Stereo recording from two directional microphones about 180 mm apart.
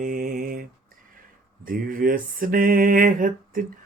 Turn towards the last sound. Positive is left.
turn(degrees=-50)  # may be behind; listen again after turning